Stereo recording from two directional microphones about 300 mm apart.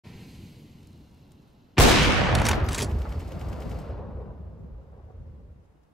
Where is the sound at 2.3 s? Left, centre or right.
Centre.